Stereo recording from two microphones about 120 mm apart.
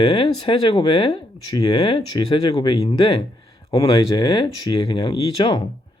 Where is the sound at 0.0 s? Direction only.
40° left (ahead or behind).